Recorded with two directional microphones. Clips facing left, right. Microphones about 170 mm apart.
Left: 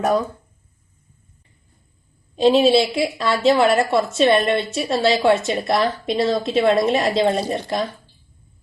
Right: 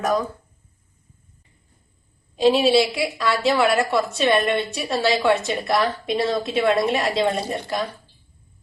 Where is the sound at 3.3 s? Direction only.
20° left (ahead or behind).